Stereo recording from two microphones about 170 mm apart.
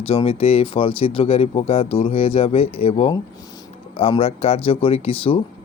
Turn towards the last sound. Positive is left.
turn(degrees=35)  # may be behind; listen again after turning